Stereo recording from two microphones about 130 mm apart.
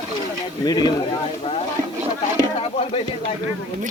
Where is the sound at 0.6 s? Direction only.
30° left (ahead or behind).